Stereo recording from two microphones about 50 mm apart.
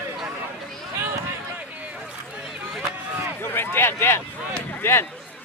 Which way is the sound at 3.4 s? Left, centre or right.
Left.